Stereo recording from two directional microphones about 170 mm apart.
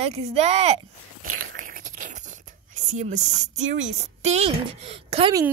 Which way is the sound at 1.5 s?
50° right (ahead or behind).